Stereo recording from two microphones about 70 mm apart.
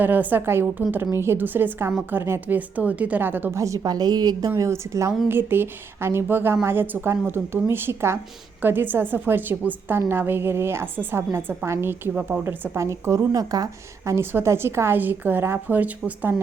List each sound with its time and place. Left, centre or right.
0.0 s a woman's voice: right
2.6 s a woman's voice: right
3.5 s a woman's voice: right
3.8 s a woman's voice: right
5.3 s a woman's voice: right
12.7 s a woman's voice: right
14.2 s a woman's voice: right